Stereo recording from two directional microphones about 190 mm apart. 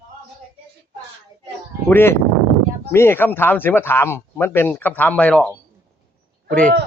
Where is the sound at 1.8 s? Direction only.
10° left (ahead or behind).